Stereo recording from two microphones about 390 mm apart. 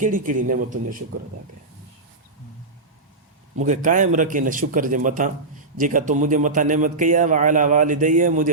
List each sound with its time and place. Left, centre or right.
0.0 s a man's voice: centre
3.6 s a man's voice: centre